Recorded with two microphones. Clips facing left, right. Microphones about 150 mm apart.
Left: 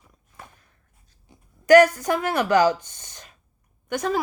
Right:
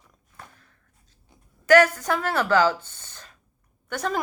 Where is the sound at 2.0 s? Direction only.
10° left (ahead or behind).